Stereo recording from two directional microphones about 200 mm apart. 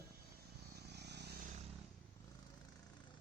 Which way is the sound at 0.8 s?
55° right (ahead or behind).